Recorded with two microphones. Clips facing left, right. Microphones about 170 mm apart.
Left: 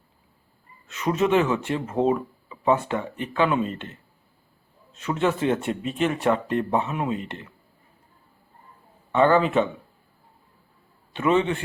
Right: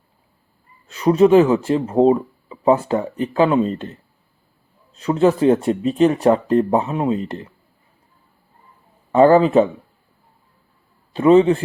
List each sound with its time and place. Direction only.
0.9 s speech: 35° right (ahead or behind)
4.9 s speech: 35° right (ahead or behind)
9.1 s speech: 35° right (ahead or behind)
11.1 s speech: 35° right (ahead or behind)